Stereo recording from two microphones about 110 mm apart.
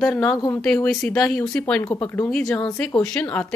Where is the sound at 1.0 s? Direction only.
5° left (ahead or behind).